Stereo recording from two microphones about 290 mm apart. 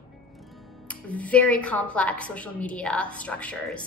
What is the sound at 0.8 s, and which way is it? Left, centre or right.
A woman's voice, centre.